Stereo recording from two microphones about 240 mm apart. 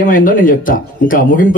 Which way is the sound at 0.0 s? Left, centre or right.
Left.